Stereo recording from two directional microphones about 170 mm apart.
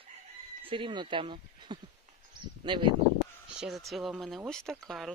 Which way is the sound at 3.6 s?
Centre (ahead or behind).